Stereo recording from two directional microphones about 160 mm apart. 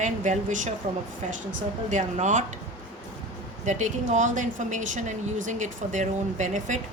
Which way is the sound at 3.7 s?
50° right (ahead or behind).